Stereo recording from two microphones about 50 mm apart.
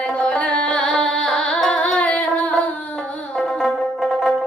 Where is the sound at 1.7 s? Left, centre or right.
Left.